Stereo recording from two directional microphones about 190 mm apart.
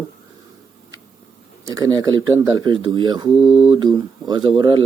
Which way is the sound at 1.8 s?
20° right (ahead or behind).